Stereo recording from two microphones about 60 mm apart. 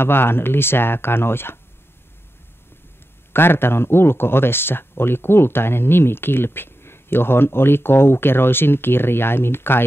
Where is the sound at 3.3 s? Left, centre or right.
Left.